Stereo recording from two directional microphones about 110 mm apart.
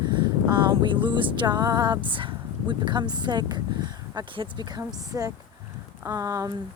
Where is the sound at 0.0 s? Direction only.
45° right (ahead or behind).